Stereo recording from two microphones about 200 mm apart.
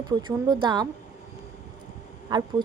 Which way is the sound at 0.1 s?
20° right (ahead or behind).